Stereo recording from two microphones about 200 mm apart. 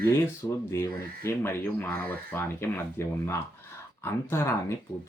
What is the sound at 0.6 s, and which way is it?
Speech, 15° left (ahead or behind).